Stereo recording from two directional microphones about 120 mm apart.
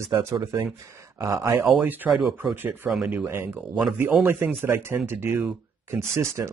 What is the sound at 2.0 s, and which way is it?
Speech, centre (ahead or behind).